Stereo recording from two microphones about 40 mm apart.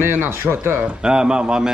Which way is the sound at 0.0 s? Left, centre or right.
Right.